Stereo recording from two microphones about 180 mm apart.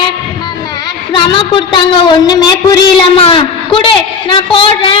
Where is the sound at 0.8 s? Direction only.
25° left (ahead or behind).